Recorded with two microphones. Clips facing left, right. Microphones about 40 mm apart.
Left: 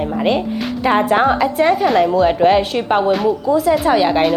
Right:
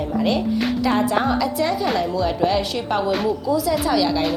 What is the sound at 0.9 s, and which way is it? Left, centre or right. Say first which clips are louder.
A woman's voice: left 8 dB; left.